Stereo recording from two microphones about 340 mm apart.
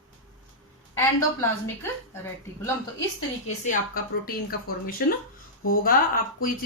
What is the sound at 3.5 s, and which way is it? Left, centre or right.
A woman's voice, left.